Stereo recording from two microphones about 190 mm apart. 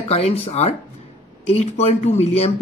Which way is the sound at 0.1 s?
35° left (ahead or behind).